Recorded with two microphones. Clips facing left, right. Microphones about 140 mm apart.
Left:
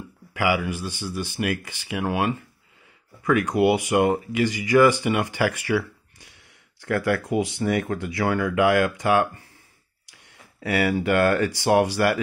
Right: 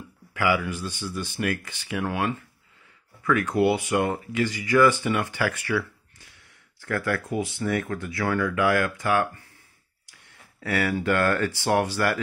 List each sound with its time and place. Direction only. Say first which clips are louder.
0.3 s speech: left 1 dB; 10° left (ahead or behind)
10.6 s speech: left 3 dB; 15° left (ahead or behind)